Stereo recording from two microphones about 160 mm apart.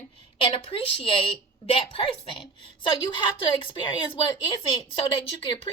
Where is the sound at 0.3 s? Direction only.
35° left (ahead or behind).